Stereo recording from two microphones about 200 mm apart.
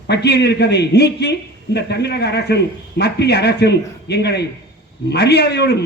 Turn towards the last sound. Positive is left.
turn(degrees=55)  # may be behind; listen again after turning